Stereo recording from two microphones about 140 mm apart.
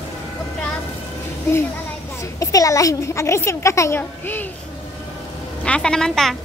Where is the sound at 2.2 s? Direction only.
25° left (ahead or behind).